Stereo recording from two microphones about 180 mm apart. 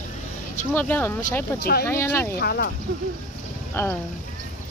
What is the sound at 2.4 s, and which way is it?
Speech, 60° left (ahead or behind).